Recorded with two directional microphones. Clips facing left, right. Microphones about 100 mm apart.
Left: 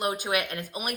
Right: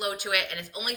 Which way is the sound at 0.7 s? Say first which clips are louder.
Left 2 dB; 45° left (ahead or behind).